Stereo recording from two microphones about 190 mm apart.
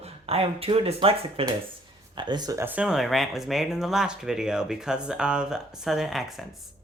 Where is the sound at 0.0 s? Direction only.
30° right (ahead or behind).